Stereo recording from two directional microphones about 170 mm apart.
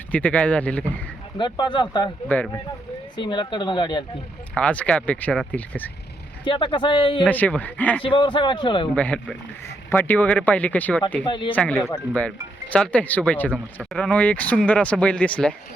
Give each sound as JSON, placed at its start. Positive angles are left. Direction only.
{"t": 0.1, "sound": "speech", "side_deg": 10}
{"t": 1.4, "sound": "speech", "side_deg": 25}
{"t": 3.2, "sound": "speech", "side_deg": 25}
{"t": 4.5, "sound": "speech", "side_deg": 5}
{"t": 6.4, "sound": "speech", "side_deg": 30}
{"t": 7.3, "sound": "speech", "side_deg": 10}
{"t": 8.0, "sound": "speech", "side_deg": 30}
{"t": 9.0, "sound": "speech", "side_deg": 5}
{"t": 11.3, "sound": "speech", "side_deg": 30}
{"t": 11.5, "sound": "speech", "side_deg": 5}